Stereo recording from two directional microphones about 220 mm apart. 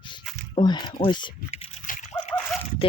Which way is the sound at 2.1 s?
5° left (ahead or behind).